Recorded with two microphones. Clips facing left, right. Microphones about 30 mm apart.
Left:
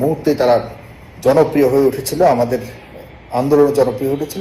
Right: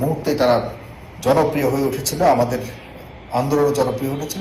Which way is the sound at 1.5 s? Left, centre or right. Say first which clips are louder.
Left 7 dB; left.